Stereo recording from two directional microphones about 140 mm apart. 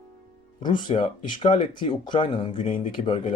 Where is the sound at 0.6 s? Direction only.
35° left (ahead or behind).